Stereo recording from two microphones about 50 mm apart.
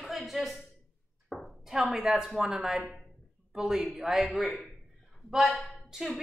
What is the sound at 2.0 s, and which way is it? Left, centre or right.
Speech, centre.